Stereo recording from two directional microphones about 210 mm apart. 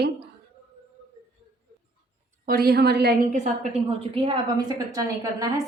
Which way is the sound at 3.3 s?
30° right (ahead or behind).